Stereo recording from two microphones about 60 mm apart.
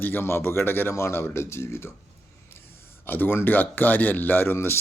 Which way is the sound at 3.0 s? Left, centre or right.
Left.